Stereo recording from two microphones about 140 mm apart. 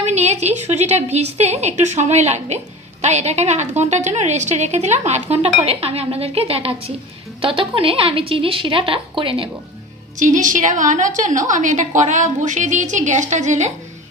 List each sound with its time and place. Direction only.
0.0 s a woman's voice: 50° right (ahead or behind)
10.2 s a woman's voice: 65° right (ahead or behind)